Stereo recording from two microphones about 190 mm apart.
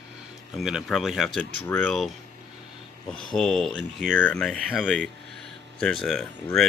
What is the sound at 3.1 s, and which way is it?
Speech, centre (ahead or behind).